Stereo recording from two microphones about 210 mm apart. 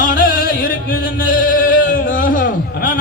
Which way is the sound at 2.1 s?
40° left (ahead or behind).